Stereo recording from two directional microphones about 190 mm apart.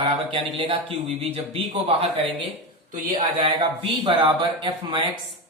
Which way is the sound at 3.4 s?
25° right (ahead or behind).